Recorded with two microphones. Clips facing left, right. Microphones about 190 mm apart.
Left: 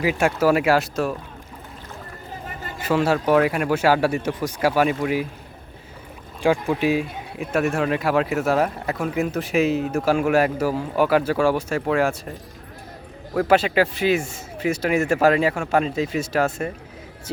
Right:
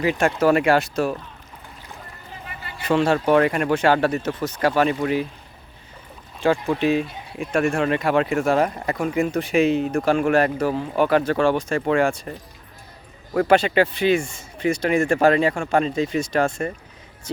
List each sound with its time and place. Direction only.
0.0 s speech: 10° left (ahead or behind)
2.5 s a sound: 45° left (ahead or behind)
2.8 s speech: 5° left (ahead or behind)
6.4 s speech: 10° left (ahead or behind)
13.3 s speech: centre (ahead or behind)